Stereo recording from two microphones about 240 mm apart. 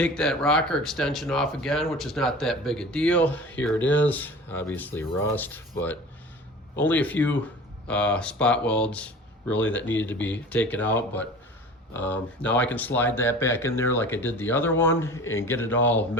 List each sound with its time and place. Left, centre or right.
0.0 s speech: centre